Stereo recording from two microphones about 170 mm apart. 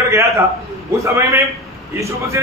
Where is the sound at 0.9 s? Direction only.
15° right (ahead or behind).